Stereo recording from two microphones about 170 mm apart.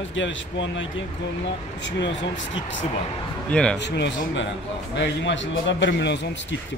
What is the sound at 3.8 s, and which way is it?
A man's voice, 90° left.